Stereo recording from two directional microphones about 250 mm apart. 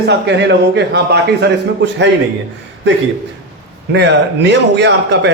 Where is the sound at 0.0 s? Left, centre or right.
Right.